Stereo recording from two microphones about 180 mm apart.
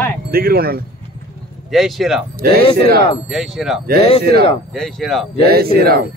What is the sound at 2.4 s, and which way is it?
Speech, 60° right (ahead or behind).